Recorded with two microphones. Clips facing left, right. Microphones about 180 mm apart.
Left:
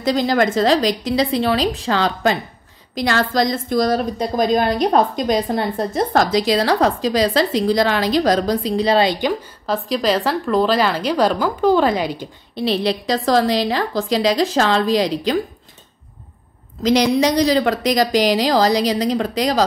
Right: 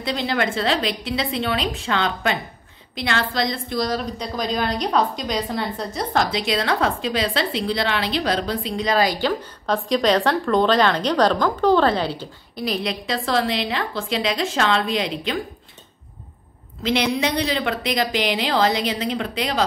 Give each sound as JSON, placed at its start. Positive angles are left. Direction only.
{"t": 0.0, "sound": "a woman's voice", "side_deg": 40}
{"t": 9.3, "sound": "a woman's voice", "side_deg": 5}
{"t": 12.5, "sound": "a woman's voice", "side_deg": 30}
{"t": 16.8, "sound": "a woman's voice", "side_deg": 40}